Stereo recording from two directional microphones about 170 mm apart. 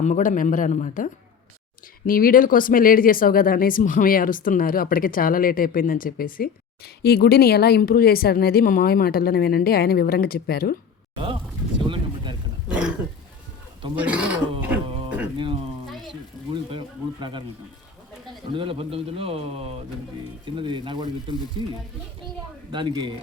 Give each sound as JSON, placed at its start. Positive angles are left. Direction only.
{"t": 0.0, "sound": "speech", "side_deg": 45}
{"t": 2.0, "sound": "speech", "side_deg": 55}
{"t": 11.9, "sound": "vehicle", "side_deg": -25}
{"t": 12.6, "sound": "throat clearing", "side_deg": -5}
{"t": 13.9, "sound": "speech", "side_deg": -10}
{"t": 14.6, "sound": "a sound", "side_deg": -10}
{"t": 16.7, "sound": "a sound", "side_deg": -30}
{"t": 18.5, "sound": "a man's voice", "side_deg": -30}
{"t": 22.7, "sound": "speech", "side_deg": -30}